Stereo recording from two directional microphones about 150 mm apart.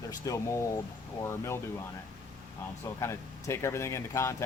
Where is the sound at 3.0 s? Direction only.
20° left (ahead or behind).